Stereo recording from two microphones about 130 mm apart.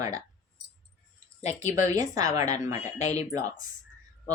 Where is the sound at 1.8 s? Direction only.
25° right (ahead or behind).